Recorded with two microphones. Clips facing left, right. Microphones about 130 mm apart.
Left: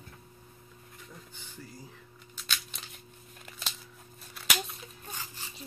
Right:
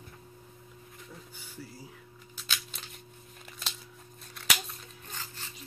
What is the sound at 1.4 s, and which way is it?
Music, 5° right (ahead or behind).